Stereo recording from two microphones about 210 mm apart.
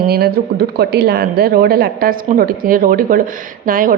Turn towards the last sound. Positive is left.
turn(degrees=-40)  # may be behind; listen again after turning